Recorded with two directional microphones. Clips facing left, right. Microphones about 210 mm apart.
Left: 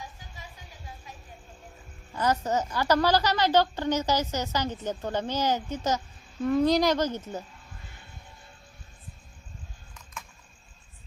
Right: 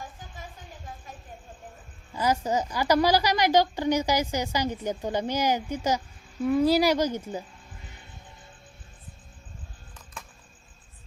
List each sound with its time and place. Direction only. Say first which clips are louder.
0.0 s a sound: right 3 dB; 50° right (ahead or behind)
2.1 s a woman's voice: right 1 dB; 10° right (ahead or behind)
10.2 s cricket: even; 35° right (ahead or behind)